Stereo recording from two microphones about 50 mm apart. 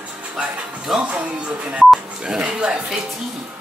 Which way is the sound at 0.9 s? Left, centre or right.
Centre.